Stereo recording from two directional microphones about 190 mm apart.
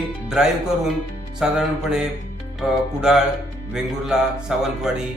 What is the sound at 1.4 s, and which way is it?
Speech, 5° right (ahead or behind).